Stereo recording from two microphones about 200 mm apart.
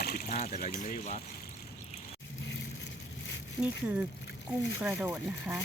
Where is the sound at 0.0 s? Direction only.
50° left (ahead or behind).